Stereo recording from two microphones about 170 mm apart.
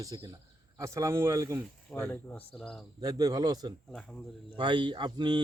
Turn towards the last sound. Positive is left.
turn(degrees=-25)  # may be behind; listen again after turning